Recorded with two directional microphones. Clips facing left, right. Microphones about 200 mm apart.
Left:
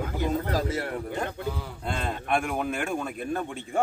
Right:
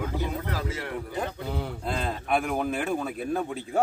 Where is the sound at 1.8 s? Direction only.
Centre (ahead or behind).